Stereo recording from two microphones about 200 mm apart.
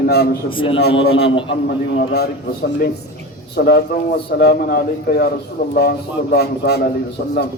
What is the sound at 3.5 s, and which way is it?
A man's voice, 55° left (ahead or behind).